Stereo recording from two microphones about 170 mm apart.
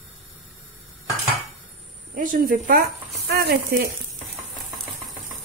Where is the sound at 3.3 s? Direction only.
70° right (ahead or behind).